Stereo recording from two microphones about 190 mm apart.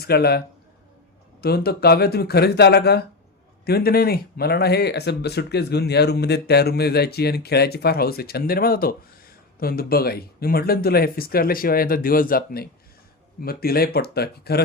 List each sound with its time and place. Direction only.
0.0 s speech: 55° left (ahead or behind)